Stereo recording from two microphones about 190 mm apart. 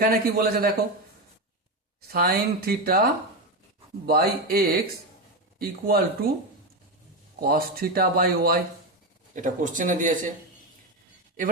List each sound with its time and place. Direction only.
0.0 s speech: 50° right (ahead or behind)
2.0 s speech: 55° right (ahead or behind)
7.3 s speech: 50° right (ahead or behind)